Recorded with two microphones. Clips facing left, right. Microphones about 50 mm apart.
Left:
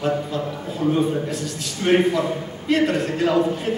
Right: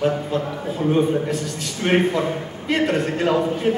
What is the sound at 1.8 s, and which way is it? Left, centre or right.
A man's voice, centre.